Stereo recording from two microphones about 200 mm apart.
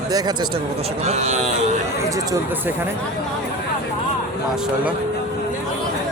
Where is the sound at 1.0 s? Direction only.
35° right (ahead or behind).